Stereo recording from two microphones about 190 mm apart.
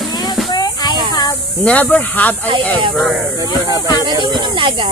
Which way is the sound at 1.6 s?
10° left (ahead or behind).